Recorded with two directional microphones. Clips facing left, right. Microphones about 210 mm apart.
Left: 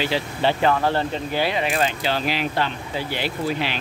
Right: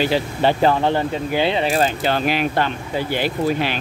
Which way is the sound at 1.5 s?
30° right (ahead or behind).